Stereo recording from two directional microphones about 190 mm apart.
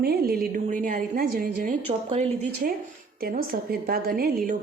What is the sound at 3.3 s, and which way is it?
A woman's voice, 50° right (ahead or behind).